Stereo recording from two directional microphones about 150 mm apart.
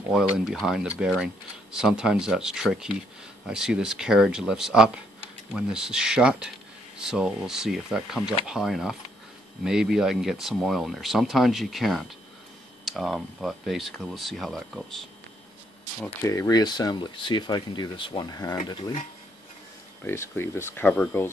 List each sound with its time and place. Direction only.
0.1 s speech: centre (ahead or behind)
16.2 s speech: 20° left (ahead or behind)
20.1 s speech: 15° left (ahead or behind)